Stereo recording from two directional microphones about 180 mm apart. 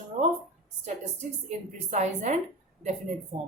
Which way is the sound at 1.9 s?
40° right (ahead or behind).